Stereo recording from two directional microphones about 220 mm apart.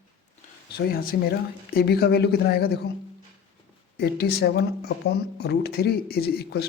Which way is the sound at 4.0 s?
45° left (ahead or behind).